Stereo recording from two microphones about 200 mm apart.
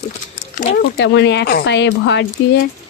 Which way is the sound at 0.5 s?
55° left (ahead or behind).